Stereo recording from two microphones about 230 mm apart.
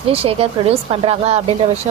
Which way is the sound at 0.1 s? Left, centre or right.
Right.